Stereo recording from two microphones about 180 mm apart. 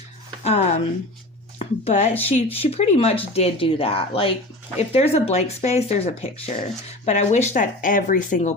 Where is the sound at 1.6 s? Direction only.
35° left (ahead or behind).